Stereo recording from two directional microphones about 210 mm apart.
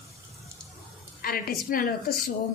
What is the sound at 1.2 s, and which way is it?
Speech, 45° left (ahead or behind).